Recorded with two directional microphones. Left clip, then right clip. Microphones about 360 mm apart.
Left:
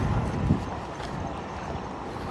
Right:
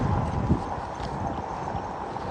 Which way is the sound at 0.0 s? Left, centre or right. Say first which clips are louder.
Right 2 dB; centre.